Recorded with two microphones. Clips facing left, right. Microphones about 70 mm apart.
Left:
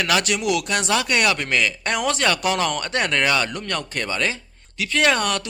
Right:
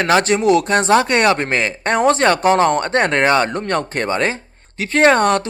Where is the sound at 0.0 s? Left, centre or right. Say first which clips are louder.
Right 7 dB; right.